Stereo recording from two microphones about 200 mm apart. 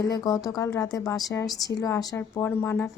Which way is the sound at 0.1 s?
20° left (ahead or behind).